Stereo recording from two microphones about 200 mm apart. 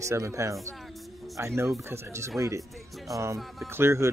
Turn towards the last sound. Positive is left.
turn(degrees=-10)  # may be behind; listen again after turning